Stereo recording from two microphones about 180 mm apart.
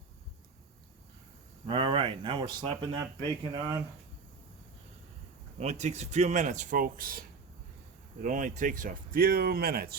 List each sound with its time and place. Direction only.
1.6 s speech: 25° right (ahead or behind)
5.5 s speech: 40° right (ahead or behind); by 10.0 s 60° right (ahead or behind)